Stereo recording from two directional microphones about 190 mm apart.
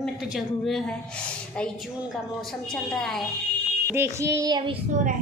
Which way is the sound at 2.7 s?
5° left (ahead or behind).